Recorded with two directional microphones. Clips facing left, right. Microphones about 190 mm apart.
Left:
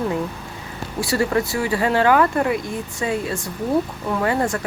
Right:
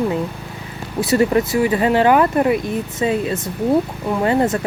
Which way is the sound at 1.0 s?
20° right (ahead or behind).